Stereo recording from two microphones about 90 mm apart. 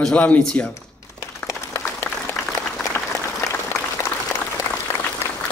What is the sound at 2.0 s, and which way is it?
Applause, 25° left (ahead or behind).